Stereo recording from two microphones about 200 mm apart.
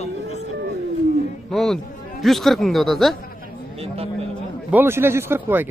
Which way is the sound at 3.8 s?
30° right (ahead or behind).